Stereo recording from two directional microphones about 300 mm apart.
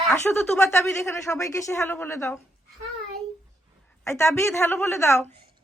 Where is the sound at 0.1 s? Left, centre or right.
Centre.